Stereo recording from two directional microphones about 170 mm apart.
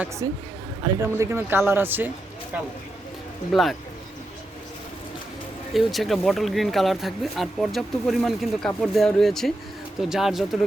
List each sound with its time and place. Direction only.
0.2 s speech: 20° right (ahead or behind)
3.5 s speech: centre (ahead or behind)
5.7 s speech: centre (ahead or behind)